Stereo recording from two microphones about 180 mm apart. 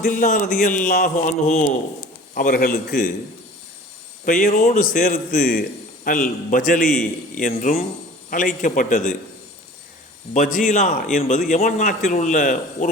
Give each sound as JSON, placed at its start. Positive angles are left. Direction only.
{"t": 0.0, "sound": "a man's voice", "side_deg": 55}
{"t": 4.3, "sound": "a man's voice", "side_deg": 50}
{"t": 10.3, "sound": "a man's voice", "side_deg": 50}